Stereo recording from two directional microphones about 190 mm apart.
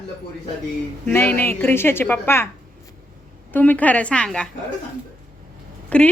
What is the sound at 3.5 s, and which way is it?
Speech, 10° left (ahead or behind).